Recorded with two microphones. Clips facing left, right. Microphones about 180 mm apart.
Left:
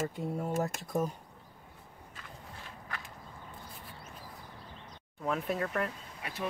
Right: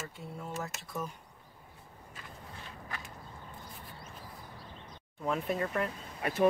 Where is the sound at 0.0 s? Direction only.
50° left (ahead or behind).